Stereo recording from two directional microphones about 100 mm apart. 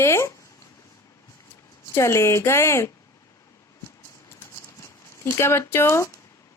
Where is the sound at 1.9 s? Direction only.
25° left (ahead or behind).